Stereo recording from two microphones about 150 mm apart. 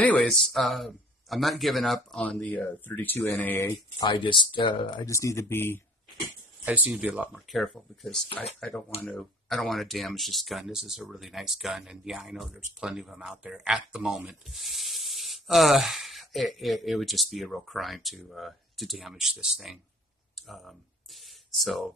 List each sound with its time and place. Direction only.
0.0 s speech: 10° left (ahead or behind)
4.0 s speech: 30° left (ahead or behind); by 5.8 s 15° left (ahead or behind)
6.6 s speech: 10° right (ahead or behind)
20.3 s a sound: centre (ahead or behind)